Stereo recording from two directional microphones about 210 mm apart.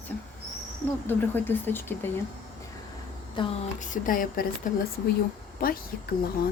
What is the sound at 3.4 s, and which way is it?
Speech, 25° left (ahead or behind).